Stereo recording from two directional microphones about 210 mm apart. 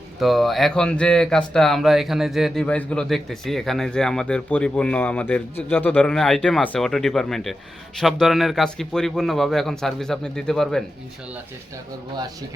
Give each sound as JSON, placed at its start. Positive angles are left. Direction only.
{"t": 0.2, "sound": "speech", "side_deg": 0}
{"t": 12.1, "sound": "speech", "side_deg": -20}